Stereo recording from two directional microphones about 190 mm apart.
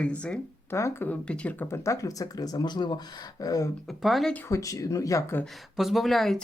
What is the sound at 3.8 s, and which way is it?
Speech, centre (ahead or behind).